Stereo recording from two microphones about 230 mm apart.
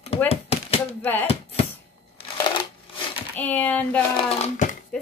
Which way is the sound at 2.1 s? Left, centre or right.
Centre.